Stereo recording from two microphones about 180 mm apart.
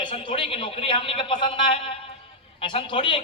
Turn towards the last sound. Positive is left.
turn(degrees=30)  # may be behind; listen again after turning